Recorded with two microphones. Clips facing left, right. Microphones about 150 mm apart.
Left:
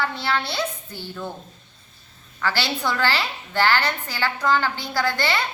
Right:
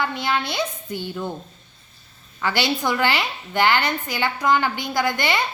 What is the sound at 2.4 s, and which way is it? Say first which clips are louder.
A woman's voice: right 2 dB; 15° right (ahead or behind).